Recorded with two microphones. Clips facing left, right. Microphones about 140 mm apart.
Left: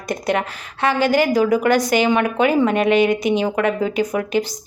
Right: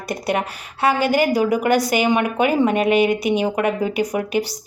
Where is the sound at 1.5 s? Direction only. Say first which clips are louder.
Left 1 dB; 10° right (ahead or behind).